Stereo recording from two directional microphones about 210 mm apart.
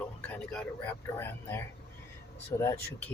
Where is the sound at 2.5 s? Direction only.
20° left (ahead or behind).